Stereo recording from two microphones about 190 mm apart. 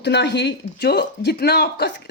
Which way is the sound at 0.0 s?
65° left (ahead or behind).